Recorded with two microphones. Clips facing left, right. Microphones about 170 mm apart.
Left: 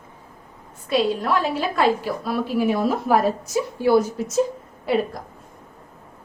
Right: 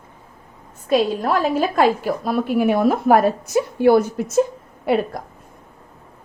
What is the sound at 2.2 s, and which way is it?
A woman's voice, 60° right (ahead or behind).